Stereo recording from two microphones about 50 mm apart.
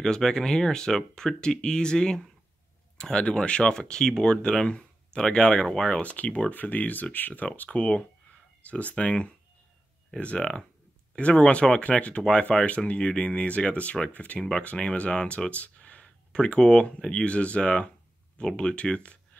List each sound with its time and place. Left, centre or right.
0.0 s speech: centre